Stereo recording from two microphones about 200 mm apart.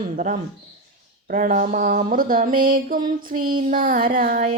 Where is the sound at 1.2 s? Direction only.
40° right (ahead or behind).